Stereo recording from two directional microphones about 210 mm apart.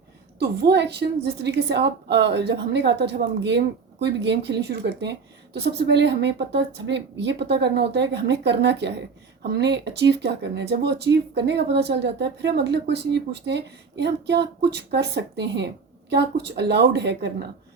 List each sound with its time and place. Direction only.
0.3 s a woman's voice: 50° right (ahead or behind)